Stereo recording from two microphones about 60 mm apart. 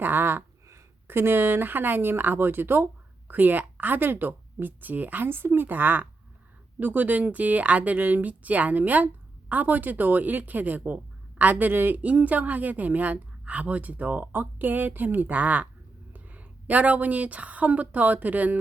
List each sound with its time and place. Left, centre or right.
0.0 s a woman's voice: right